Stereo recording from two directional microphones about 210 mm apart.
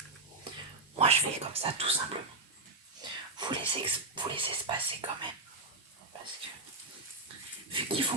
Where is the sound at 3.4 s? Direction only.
25° right (ahead or behind).